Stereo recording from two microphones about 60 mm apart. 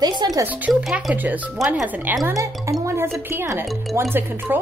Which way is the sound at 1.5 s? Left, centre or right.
Centre.